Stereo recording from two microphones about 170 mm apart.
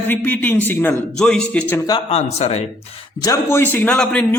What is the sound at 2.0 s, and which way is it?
Speech, 35° left (ahead or behind).